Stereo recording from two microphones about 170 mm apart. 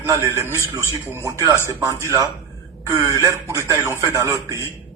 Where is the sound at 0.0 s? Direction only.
15° right (ahead or behind).